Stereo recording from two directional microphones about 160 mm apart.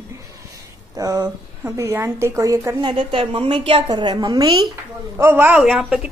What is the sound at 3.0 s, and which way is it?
A woman's voice, 35° right (ahead or behind).